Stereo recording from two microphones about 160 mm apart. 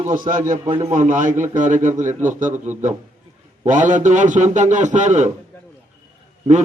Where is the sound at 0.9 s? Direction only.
50° right (ahead or behind).